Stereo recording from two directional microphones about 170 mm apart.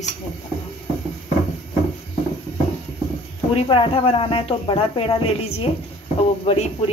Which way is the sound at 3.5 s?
35° left (ahead or behind).